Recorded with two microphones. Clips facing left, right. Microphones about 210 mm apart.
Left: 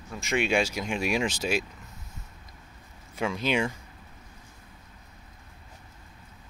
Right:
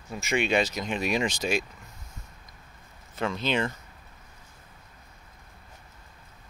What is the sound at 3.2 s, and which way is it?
Speech, 10° left (ahead or behind).